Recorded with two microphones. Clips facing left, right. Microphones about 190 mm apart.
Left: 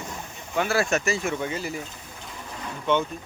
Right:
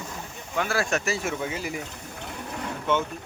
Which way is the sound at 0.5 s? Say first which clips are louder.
Left 3 dB; 5° left (ahead or behind).